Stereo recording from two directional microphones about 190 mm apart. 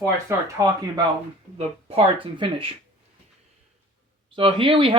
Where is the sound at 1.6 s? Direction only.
30° right (ahead or behind).